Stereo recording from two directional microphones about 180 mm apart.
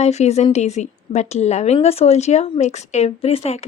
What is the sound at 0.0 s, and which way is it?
A woman's voice, 40° left (ahead or behind).